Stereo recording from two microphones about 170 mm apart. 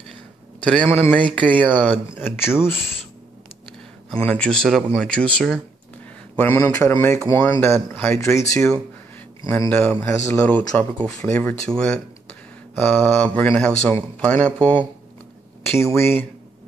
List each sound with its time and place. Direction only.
0.6 s a man's voice: 5° left (ahead or behind)
4.1 s speech: 5° left (ahead or behind)
16.0 s speech: 15° left (ahead or behind)